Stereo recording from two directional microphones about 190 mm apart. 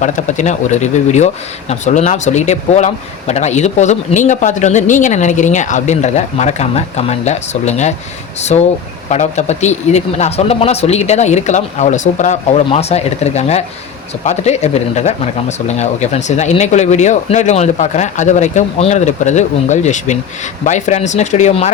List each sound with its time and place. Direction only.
0.0 s speech: 40° left (ahead or behind)